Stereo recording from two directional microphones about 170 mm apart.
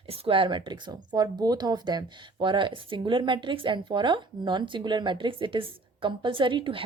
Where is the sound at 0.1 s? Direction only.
35° right (ahead or behind).